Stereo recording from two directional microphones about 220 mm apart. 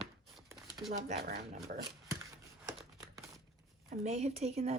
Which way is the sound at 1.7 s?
40° right (ahead or behind).